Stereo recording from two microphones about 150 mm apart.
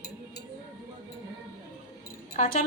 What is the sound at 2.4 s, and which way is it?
Speech, 75° left (ahead or behind).